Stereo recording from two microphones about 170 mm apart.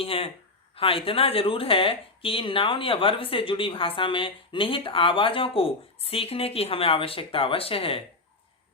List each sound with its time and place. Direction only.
0.0 s speech: 35° left (ahead or behind)